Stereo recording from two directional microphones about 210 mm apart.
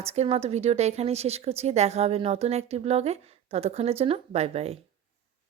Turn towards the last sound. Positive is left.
turn(degrees=-30)  # may be behind; listen again after turning